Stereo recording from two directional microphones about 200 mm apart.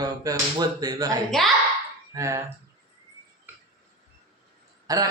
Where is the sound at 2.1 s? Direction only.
15° right (ahead or behind).